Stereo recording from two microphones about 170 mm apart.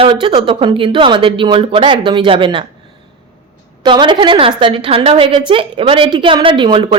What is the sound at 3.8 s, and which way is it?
A woman's voice, 25° right (ahead or behind).